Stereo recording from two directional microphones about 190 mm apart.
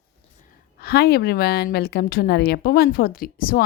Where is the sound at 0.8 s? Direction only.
55° left (ahead or behind).